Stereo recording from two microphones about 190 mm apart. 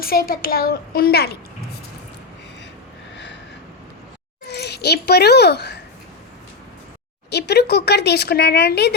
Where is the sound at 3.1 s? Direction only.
65° left (ahead or behind).